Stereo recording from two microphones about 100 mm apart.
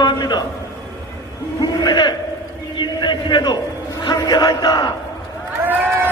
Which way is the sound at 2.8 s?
50° left (ahead or behind).